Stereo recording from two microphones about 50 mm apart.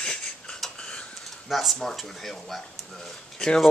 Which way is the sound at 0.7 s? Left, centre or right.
Left.